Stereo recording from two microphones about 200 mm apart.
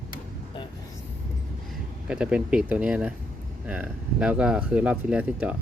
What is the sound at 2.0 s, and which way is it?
Speech, 5° right (ahead or behind).